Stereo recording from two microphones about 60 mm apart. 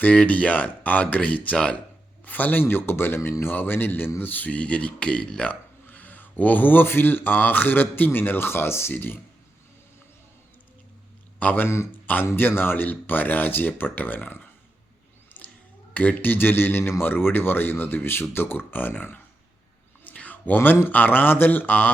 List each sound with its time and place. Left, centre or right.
0.0 s speech: left
5.9 s speech: left
11.3 s a man's voice: left
15.3 s a sound: left
16.0 s speech: left
20.1 s a sound: left
20.8 s speech: left